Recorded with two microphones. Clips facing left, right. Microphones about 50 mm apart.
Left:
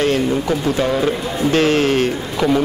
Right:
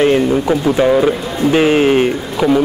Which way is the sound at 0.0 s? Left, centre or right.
Centre.